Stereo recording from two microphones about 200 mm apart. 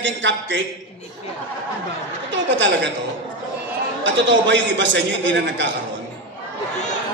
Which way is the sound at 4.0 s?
65° right (ahead or behind).